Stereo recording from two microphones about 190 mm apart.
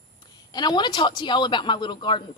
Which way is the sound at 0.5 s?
25° left (ahead or behind).